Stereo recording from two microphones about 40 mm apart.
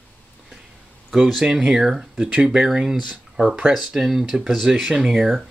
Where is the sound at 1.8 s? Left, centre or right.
Centre.